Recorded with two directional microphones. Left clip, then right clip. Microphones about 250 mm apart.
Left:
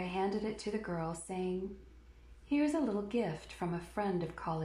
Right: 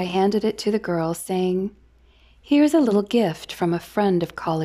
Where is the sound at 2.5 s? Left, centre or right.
Right.